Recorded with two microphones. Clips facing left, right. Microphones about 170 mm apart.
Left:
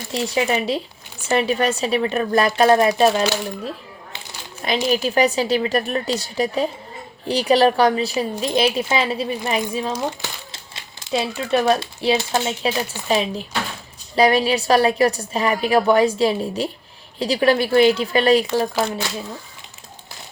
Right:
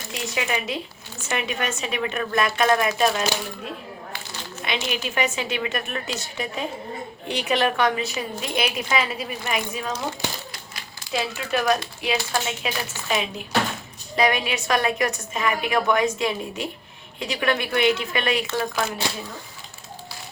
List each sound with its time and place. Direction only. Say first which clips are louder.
0.1 s a woman's voice: left 7 dB; 35° left (ahead or behind)
4.6 s a woman's voice: left 8 dB; 35° left (ahead or behind)